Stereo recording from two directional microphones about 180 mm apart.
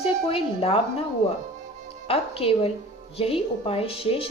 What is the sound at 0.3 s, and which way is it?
Speech, 30° left (ahead or behind).